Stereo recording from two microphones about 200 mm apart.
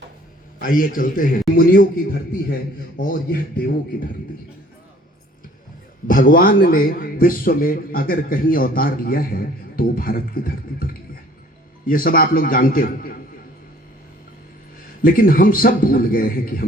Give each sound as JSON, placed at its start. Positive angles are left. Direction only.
{"t": 0.6, "sound": "a man's voice", "side_deg": 45}
{"t": 3.0, "sound": "a man's voice", "side_deg": 45}
{"t": 6.1, "sound": "a man's voice", "side_deg": 45}
{"t": 15.0, "sound": "a man's voice", "side_deg": 45}